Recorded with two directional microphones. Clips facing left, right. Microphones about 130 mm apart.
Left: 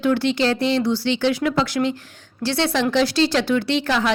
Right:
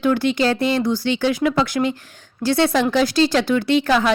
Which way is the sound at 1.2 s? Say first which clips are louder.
Right 2 dB; 10° right (ahead or behind).